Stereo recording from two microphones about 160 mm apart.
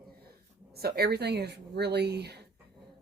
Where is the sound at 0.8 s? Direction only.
80° right.